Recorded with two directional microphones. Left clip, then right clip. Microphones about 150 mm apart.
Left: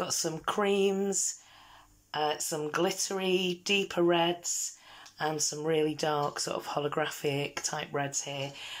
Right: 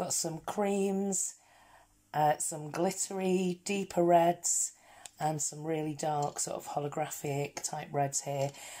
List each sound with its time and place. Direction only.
0.0 s speech: 30° right (ahead or behind)
2.0 s speech: 45° right (ahead or behind)
2.6 s speech: 30° right (ahead or behind)
5.6 s speech: 25° right (ahead or behind)
8.1 s speech: 40° right (ahead or behind)